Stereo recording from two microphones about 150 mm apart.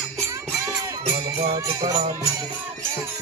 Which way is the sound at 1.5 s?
25° right (ahead or behind).